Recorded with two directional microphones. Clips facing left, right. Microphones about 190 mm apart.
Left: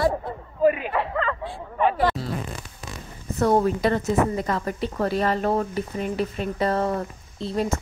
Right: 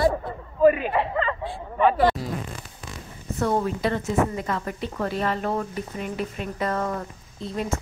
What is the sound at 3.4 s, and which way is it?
A woman's voice, 45° left (ahead or behind).